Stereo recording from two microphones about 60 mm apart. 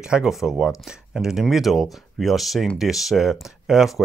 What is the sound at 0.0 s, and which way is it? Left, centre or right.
Speech, centre.